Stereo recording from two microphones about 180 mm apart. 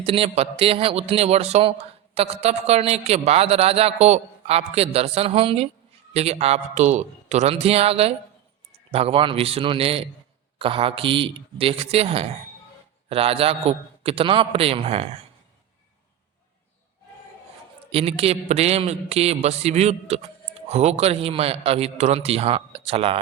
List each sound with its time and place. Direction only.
0.0 s speech: 30° right (ahead or behind)
17.9 s speech: 35° right (ahead or behind)